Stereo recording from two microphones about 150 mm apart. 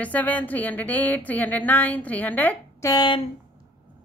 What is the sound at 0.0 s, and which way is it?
A woman's voice, 10° left (ahead or behind).